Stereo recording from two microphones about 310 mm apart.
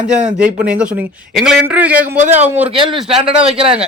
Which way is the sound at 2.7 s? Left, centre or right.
Centre.